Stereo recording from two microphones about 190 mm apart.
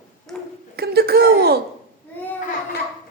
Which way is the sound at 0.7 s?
55° right (ahead or behind).